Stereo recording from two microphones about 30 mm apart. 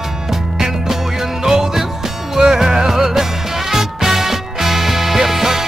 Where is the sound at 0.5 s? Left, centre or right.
Centre.